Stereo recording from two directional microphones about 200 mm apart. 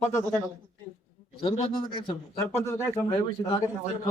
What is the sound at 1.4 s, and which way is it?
Speech, 25° left (ahead or behind).